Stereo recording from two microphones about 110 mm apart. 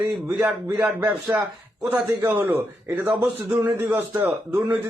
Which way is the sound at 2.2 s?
20° right (ahead or behind).